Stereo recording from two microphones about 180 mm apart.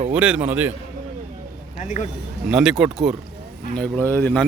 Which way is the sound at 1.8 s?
40° left (ahead or behind).